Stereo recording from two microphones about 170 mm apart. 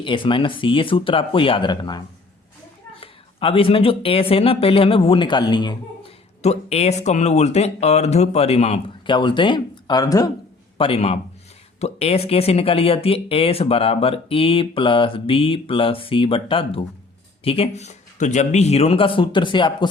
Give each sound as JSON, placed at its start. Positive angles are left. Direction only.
{"t": 0.0, "sound": "speech", "side_deg": 30}
{"t": 6.4, "sound": "speech", "side_deg": 40}
{"t": 10.8, "sound": "a man's voice", "side_deg": 35}